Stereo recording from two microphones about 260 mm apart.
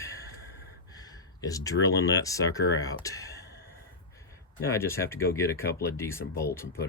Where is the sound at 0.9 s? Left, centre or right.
Centre.